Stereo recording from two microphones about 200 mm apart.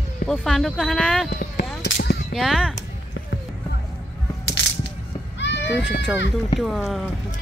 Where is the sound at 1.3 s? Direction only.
55° left (ahead or behind).